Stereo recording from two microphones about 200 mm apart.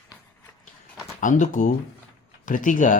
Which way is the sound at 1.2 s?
40° left (ahead or behind).